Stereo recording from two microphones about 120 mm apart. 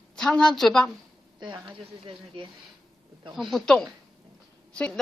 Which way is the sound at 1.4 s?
40° right (ahead or behind).